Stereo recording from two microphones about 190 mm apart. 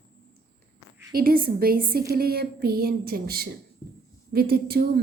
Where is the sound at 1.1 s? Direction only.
50° right (ahead or behind).